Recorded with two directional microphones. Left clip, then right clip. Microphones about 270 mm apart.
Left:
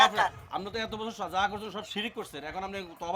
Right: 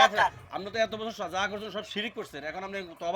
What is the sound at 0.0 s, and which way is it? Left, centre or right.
A man's voice, centre.